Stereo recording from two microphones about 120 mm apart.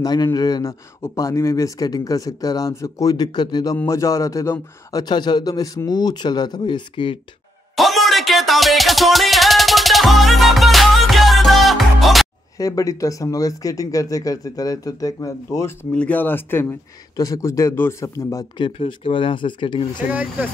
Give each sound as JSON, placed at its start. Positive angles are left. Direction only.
{"t": 0.0, "sound": "a man's voice", "side_deg": 35}
{"t": 3.7, "sound": "a man's voice", "side_deg": 25}
{"t": 7.7, "sound": "music", "side_deg": 0}
{"t": 12.5, "sound": "speech", "side_deg": 30}
{"t": 15.9, "sound": "speech", "side_deg": 10}
{"t": 18.6, "sound": "speech", "side_deg": 45}
{"t": 20.1, "sound": "speech", "side_deg": -15}